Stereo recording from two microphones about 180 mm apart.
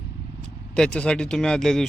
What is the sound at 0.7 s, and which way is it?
Speech, 5° left (ahead or behind).